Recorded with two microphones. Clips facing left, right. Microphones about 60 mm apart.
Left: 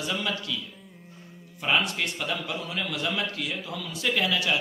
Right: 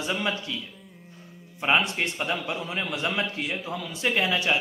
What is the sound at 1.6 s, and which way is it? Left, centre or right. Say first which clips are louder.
A man's voice: right 2 dB; right.